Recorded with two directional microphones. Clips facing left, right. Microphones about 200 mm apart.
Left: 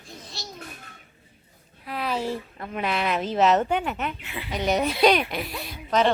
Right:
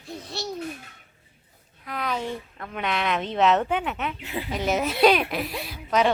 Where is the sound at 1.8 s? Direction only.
30° left (ahead or behind).